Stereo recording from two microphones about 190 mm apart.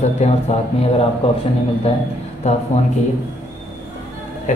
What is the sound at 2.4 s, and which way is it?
Speech, 35° left (ahead or behind).